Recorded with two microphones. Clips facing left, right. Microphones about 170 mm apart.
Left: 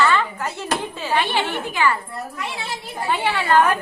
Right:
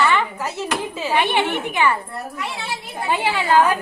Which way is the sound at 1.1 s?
20° right (ahead or behind).